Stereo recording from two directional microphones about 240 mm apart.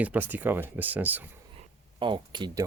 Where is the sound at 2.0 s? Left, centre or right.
Centre.